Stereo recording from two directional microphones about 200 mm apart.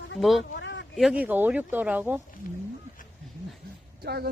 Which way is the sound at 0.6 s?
60° left (ahead or behind).